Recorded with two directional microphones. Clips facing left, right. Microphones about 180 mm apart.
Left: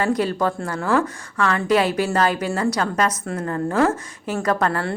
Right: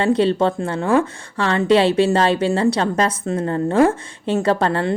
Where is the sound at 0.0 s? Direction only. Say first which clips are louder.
Right 4 dB; 25° right (ahead or behind).